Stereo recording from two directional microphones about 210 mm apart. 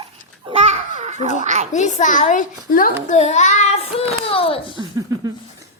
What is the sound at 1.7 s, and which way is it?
A child's voice, 35° left (ahead or behind).